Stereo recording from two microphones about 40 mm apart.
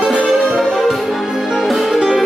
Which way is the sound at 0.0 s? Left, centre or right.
Right.